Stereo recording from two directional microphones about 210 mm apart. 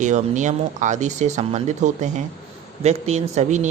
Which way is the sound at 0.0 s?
35° right (ahead or behind).